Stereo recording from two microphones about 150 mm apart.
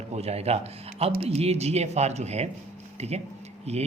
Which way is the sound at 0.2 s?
45° right (ahead or behind).